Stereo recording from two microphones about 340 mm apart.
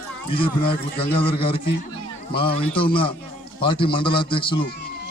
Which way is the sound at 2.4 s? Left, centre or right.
Centre.